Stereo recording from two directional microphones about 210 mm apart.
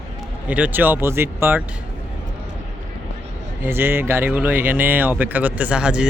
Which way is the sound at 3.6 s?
10° right (ahead or behind).